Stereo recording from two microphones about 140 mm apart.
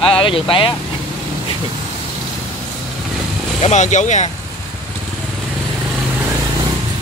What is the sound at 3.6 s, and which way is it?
Speech, 60° left (ahead or behind).